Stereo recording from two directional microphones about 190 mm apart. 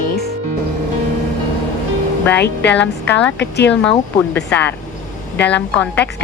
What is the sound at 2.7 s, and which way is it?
Speech, 10° left (ahead or behind).